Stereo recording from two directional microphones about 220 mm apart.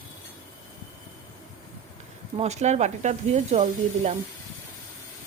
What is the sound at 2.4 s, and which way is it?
Speech, 30° right (ahead or behind).